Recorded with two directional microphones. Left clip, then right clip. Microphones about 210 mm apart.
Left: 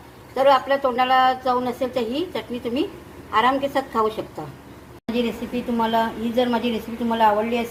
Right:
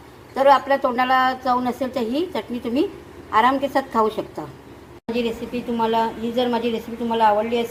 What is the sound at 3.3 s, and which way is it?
Speech, 35° right (ahead or behind).